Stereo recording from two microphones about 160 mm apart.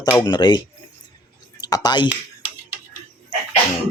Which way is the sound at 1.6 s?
25° left (ahead or behind).